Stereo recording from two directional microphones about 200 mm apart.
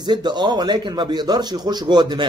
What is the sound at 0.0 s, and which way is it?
Speech, 20° right (ahead or behind).